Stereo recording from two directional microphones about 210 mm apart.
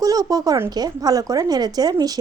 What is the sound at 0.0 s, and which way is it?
A woman's voice, 15° right (ahead or behind).